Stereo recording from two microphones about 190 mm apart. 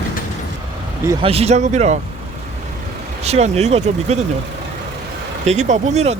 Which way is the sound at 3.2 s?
35° right (ahead or behind).